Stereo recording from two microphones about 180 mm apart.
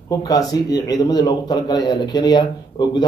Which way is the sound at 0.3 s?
20° left (ahead or behind).